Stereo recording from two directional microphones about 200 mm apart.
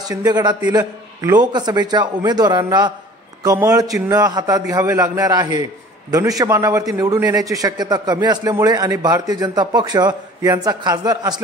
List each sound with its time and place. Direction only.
0.1 s a man's voice: 20° right (ahead or behind)